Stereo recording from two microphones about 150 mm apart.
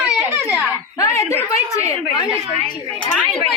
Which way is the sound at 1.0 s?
20° left (ahead or behind).